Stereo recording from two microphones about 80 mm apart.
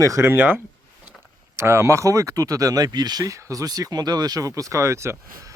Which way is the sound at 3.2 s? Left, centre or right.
Right.